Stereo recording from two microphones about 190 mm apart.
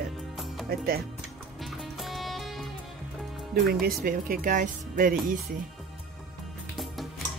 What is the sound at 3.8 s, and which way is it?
Speech, 50° right (ahead or behind).